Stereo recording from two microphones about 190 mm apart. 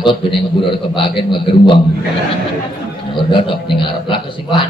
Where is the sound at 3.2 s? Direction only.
25° left (ahead or behind).